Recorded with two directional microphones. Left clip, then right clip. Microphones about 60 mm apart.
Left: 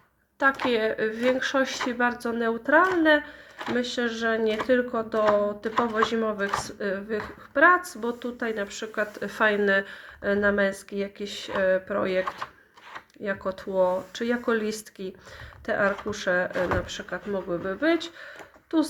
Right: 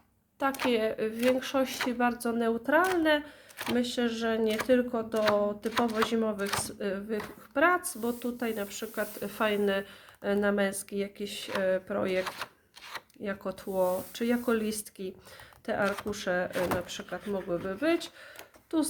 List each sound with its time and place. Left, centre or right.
0.3 s speech: right
13.2 s speech: right